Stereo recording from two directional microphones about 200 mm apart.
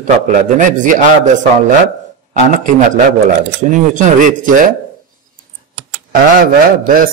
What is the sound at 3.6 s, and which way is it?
A man's voice, 40° right (ahead or behind).